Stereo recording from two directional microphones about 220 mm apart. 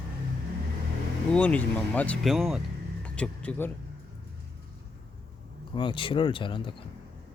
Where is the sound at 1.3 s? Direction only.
5° left (ahead or behind).